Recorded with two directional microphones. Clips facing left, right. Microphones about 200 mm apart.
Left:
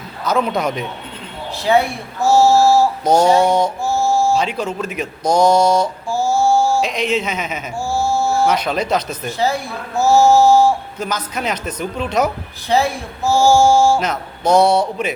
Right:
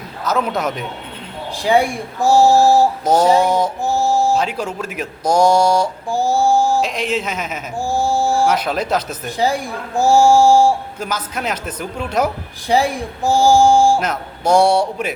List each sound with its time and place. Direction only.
0.3 s speech: centre (ahead or behind)
3.0 s speech: 5° right (ahead or behind)
3.8 s music: 15° right (ahead or behind)
4.4 s speech: 10° right (ahead or behind)
6.8 s speech: 5° right (ahead or behind)
7.8 s a sound: 15° right (ahead or behind)
9.4 s speech: 15° right (ahead or behind)